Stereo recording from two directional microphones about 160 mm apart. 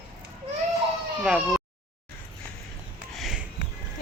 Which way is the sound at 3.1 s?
Centre (ahead or behind).